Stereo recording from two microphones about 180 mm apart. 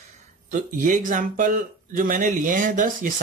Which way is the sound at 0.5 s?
45° right (ahead or behind).